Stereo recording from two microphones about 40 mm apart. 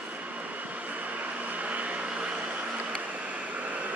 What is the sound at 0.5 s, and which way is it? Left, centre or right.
Vehicle, right.